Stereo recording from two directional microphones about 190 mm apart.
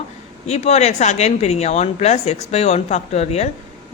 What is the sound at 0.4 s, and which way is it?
Speech, 35° left (ahead or behind).